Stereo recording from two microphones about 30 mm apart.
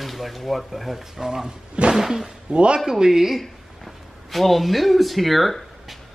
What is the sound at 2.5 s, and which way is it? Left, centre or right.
Speech, right.